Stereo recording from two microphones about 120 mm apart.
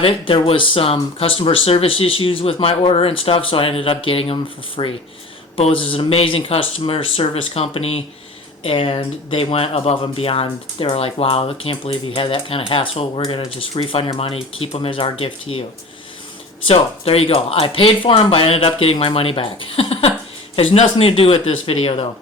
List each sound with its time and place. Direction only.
0.0 s speech: 50° left (ahead or behind)
16.6 s speech: 50° left (ahead or behind)
20.8 s speech: 50° left (ahead or behind)